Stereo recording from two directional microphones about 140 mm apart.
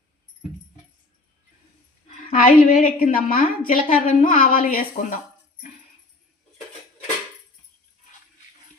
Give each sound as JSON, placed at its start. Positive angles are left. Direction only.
{"t": 2.3, "sound": "a woman's voice", "side_deg": 70}